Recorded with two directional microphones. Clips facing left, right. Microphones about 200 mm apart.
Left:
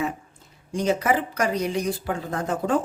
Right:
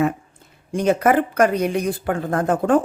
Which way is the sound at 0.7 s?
55° right (ahead or behind).